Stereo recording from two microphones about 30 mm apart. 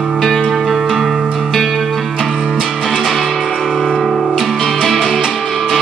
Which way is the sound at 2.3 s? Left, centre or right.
Centre.